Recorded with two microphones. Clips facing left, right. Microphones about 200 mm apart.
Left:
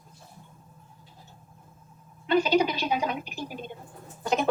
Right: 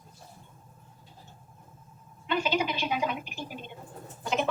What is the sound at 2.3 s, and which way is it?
A woman's voice, 40° left (ahead or behind).